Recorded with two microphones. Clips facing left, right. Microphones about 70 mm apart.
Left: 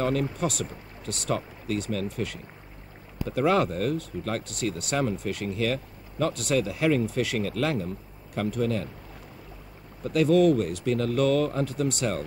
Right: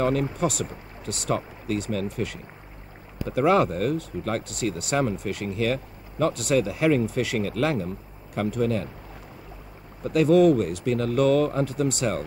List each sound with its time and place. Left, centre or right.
0.0 s speech: centre
10.0 s speech: centre